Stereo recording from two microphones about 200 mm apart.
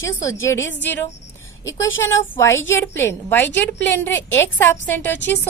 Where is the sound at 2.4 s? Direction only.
10° left (ahead or behind).